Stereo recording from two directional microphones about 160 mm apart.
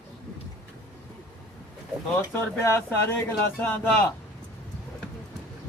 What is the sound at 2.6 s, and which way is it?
Speech, 15° left (ahead or behind).